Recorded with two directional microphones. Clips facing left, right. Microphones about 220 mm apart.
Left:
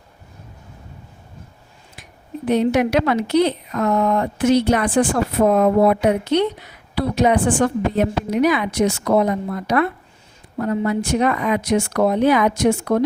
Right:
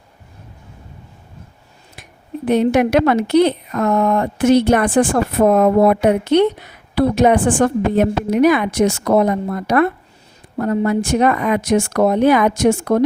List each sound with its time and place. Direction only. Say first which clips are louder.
2.5 s speech: right 3 dB; 55° right (ahead or behind)